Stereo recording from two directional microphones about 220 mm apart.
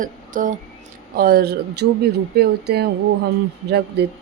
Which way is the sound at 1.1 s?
40° right (ahead or behind).